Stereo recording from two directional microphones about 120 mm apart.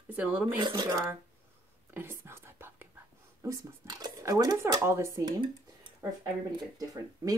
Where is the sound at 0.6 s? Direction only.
35° right (ahead or behind).